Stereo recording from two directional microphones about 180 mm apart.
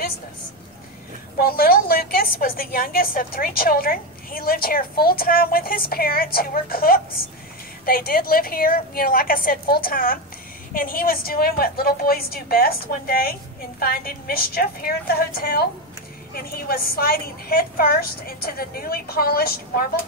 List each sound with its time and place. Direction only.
1.4 s a woman's voice: 55° left (ahead or behind)